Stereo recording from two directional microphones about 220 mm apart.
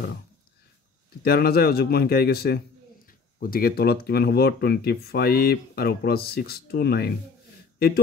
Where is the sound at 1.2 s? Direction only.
45° left (ahead or behind).